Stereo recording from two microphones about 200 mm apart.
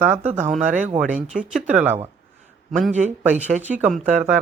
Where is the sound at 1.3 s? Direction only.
5° right (ahead or behind).